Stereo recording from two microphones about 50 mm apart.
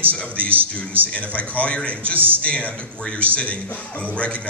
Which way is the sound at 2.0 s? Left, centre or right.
Right.